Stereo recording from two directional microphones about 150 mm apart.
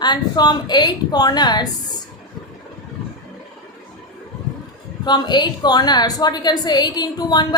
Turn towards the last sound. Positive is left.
turn(degrees=25)  # may be behind; listen again after turning